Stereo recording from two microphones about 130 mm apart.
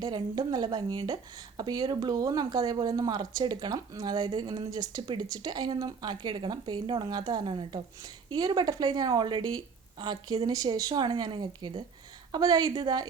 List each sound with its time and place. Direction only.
0.0 s speech: 35° right (ahead or behind)